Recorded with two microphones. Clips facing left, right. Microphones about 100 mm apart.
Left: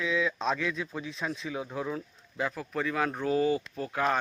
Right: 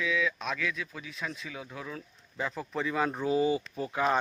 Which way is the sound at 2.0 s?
5° left (ahead or behind).